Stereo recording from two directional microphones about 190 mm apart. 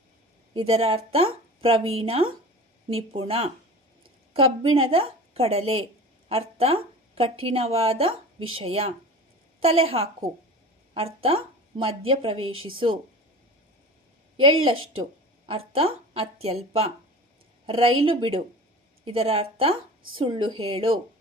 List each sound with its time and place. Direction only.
0.5 s speech: 30° right (ahead or behind)
14.6 s a woman's voice: 30° right (ahead or behind)